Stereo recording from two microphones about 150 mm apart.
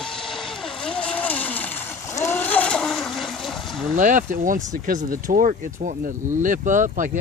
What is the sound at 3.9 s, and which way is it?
Speech, 60° right (ahead or behind).